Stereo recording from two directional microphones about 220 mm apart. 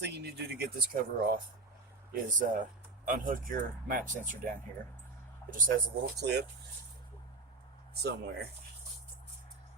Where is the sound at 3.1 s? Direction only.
40° right (ahead or behind).